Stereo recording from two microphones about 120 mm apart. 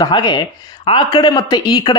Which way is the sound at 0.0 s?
40° left (ahead or behind).